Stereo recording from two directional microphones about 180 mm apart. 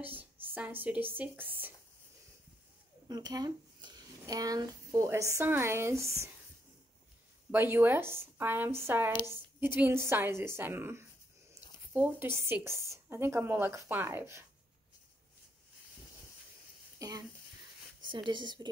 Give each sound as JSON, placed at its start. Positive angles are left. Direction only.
{"t": 0.0, "sound": "a woman's voice", "side_deg": -10}
{"t": 3.1, "sound": "speech", "side_deg": -20}
{"t": 7.5, "sound": "a woman's voice", "side_deg": -10}
{"t": 17.0, "sound": "speech", "side_deg": -20}